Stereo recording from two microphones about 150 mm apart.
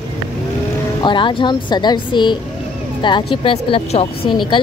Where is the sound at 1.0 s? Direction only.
35° left (ahead or behind).